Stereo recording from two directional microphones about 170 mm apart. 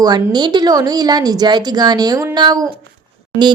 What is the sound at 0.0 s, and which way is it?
Speech, 25° right (ahead or behind).